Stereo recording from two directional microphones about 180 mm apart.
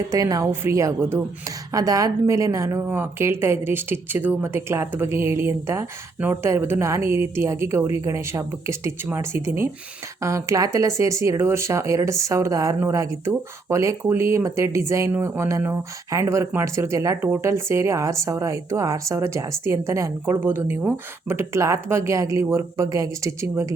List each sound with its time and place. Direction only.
0.1 s speech: 20° right (ahead or behind)